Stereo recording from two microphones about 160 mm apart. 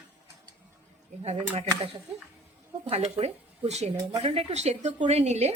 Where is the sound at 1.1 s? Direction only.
45° right (ahead or behind).